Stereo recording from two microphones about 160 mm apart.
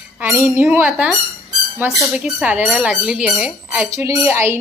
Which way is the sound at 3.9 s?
20° right (ahead or behind).